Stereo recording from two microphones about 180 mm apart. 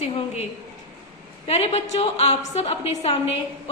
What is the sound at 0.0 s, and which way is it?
Speech, 35° left (ahead or behind).